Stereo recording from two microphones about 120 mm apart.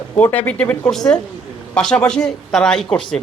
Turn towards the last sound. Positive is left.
turn(degrees=5)  # may be behind; listen again after turning